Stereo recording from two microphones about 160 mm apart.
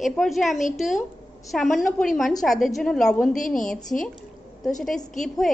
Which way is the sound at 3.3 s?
55° left (ahead or behind).